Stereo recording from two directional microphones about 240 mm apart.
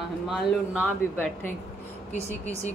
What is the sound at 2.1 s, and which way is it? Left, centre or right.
Speech, left.